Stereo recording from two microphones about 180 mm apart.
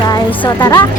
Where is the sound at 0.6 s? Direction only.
25° left (ahead or behind).